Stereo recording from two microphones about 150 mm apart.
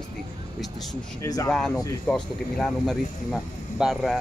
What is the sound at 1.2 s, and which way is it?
Speech, 20° left (ahead or behind).